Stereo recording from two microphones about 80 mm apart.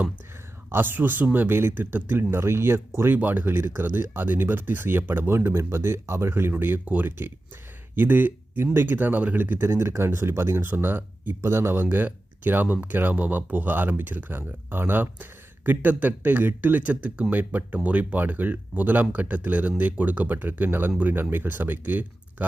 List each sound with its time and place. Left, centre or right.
0.7 s speech: right
3.2 s speech: right